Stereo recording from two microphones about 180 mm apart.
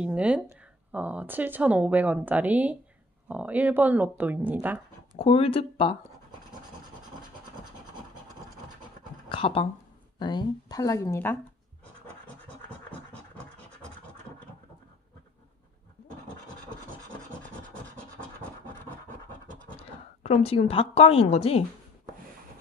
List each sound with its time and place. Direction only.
0.0 s speech: 5° right (ahead or behind)
5.1 s speech: 30° left (ahead or behind)
9.3 s speech: 30° left (ahead or behind); by 11.3 s 15° left (ahead or behind)
19.8 s a woman's voice: 35° left (ahead or behind)